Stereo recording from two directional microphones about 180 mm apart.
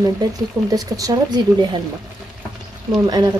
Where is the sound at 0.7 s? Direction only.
20° right (ahead or behind).